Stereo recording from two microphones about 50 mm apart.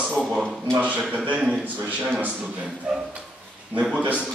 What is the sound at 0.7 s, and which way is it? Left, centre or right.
Speech, right.